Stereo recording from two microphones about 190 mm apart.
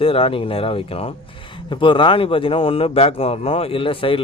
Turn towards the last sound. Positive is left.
turn(degrees=30)  # may be behind; listen again after turning